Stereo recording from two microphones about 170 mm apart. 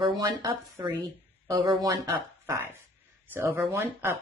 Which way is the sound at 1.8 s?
20° right (ahead or behind).